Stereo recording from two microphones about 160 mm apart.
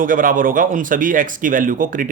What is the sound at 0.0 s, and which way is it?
Speech, 60° right (ahead or behind).